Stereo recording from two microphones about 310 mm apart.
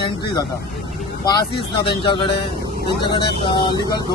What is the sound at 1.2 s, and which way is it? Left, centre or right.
Speech, centre.